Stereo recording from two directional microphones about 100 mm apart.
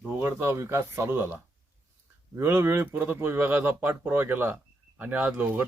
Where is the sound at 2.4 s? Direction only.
20° right (ahead or behind).